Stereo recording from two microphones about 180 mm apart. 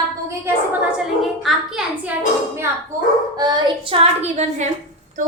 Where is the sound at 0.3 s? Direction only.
10° right (ahead or behind).